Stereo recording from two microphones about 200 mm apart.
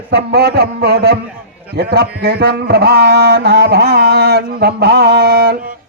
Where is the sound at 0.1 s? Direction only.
55° right (ahead or behind).